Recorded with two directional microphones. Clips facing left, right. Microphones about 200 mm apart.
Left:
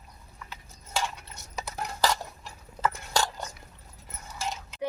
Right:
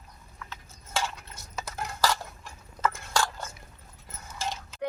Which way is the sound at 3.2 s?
15° left (ahead or behind).